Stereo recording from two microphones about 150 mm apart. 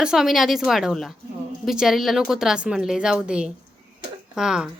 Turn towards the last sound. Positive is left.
turn(degrees=-5)  # may be behind; listen again after turning